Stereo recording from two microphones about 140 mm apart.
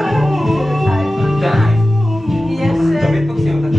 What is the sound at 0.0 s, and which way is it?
Music, centre (ahead or behind).